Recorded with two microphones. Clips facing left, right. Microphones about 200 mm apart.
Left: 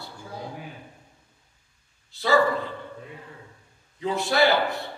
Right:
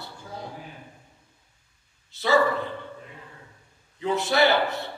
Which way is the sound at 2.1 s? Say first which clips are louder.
Even; 20° right (ahead or behind).